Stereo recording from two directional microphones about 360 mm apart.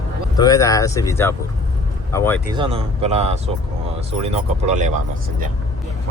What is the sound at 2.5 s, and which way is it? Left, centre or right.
Speech, centre.